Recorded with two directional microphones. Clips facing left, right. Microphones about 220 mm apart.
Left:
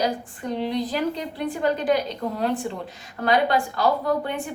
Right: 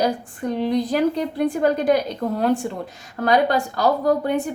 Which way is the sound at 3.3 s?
40° right (ahead or behind).